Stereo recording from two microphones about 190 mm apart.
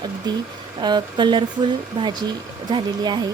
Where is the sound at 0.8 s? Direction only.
25° right (ahead or behind).